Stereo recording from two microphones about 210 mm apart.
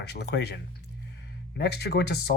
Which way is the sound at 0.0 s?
50° left (ahead or behind).